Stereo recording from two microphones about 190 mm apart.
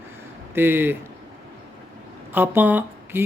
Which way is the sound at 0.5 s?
10° right (ahead or behind).